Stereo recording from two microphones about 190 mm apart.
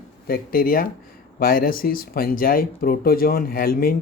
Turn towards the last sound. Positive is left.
turn(degrees=50)  # may be behind; listen again after turning